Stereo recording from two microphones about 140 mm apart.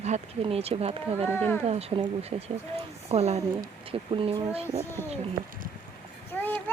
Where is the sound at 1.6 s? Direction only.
50° right (ahead or behind).